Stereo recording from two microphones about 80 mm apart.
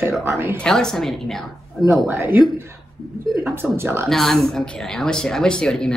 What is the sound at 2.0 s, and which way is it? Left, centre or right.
Speech, right.